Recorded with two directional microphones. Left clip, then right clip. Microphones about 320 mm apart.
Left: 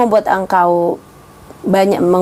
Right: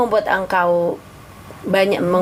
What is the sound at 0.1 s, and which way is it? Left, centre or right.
Speech, left.